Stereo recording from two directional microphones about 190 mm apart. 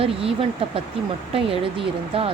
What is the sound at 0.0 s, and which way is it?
Speech, 30° right (ahead or behind).